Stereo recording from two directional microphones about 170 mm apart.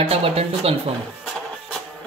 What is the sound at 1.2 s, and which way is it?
Music, centre (ahead or behind).